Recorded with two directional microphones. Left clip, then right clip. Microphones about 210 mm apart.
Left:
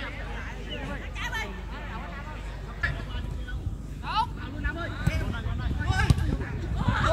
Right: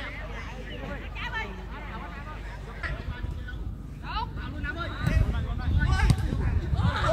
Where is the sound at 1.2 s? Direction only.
45° left (ahead or behind).